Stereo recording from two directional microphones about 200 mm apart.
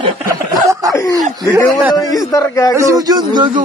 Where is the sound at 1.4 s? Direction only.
15° right (ahead or behind).